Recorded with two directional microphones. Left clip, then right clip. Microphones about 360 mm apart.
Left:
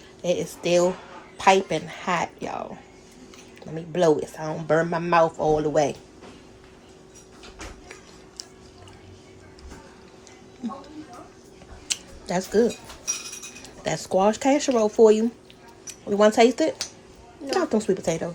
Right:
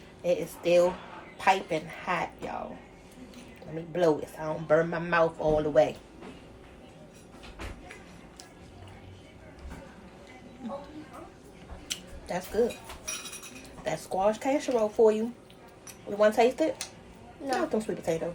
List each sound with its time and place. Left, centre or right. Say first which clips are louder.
0.2 s a woman's voice: left 3 dB; left
3.9 s a woman's voice: left 5 dB; left
11.9 s a sound: left 7 dB; left
13.8 s a woman's voice: left 6 dB; left
17.7 s a woman's voice: left 6 dB; left